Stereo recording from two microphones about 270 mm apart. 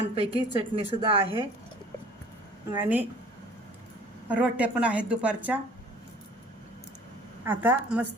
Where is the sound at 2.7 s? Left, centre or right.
Centre.